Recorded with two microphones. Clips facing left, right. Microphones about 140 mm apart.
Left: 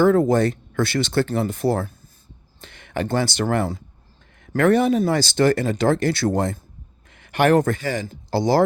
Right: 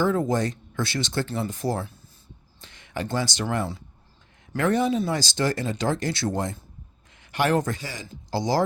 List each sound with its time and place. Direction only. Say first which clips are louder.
0.0 s speech: left 7 dB; 60° left (ahead or behind)